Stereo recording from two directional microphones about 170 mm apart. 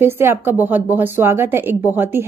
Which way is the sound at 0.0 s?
15° right (ahead or behind).